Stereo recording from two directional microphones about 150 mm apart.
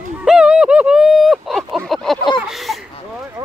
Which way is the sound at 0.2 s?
5° right (ahead or behind).